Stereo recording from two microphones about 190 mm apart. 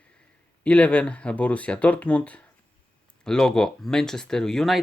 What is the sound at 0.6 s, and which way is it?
Speech, 5° left (ahead or behind).